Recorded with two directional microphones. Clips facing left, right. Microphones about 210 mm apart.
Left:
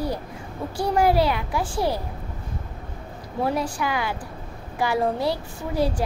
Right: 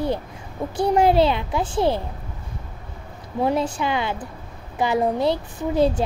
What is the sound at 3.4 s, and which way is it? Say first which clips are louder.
Speech: right 3 dB; 25° right (ahead or behind).